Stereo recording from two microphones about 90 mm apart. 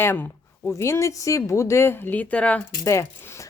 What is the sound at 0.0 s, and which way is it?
Speech, 25° left (ahead or behind).